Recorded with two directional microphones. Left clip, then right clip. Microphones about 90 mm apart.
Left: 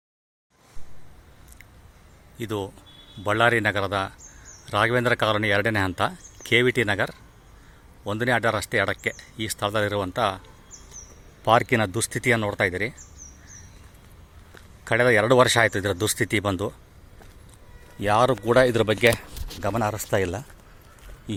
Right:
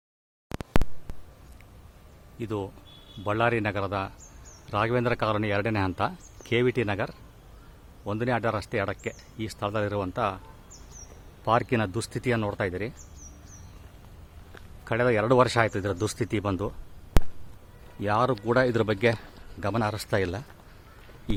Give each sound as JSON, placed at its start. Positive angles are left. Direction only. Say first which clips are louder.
{"t": 2.4, "sound": "speech", "louder": "left 3 dB", "side_deg": 25}
{"t": 11.4, "sound": "speech", "louder": "left 5 dB", "side_deg": 25}
{"t": 14.8, "sound": "speech", "louder": "left 5 dB", "side_deg": 20}
{"t": 18.0, "sound": "speech", "louder": "left 5 dB", "side_deg": 15}